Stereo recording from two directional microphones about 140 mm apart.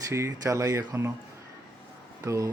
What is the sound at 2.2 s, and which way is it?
Speech, 20° right (ahead or behind).